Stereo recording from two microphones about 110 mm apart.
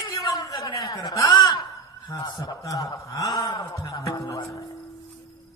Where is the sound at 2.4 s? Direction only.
35° left (ahead or behind).